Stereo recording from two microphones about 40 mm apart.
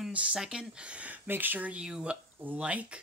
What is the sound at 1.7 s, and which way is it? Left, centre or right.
Speech, centre.